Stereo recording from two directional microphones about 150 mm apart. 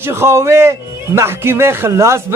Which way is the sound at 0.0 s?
15° right (ahead or behind).